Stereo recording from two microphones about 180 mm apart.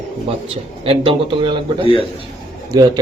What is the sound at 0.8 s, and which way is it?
Speech, 30° right (ahead or behind).